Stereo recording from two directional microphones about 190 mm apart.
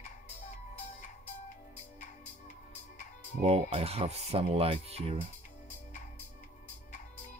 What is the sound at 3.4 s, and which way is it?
Speech, 35° right (ahead or behind).